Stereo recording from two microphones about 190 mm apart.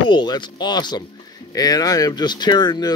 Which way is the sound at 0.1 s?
25° left (ahead or behind).